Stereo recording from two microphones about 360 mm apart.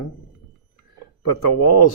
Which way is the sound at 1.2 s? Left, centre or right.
Left.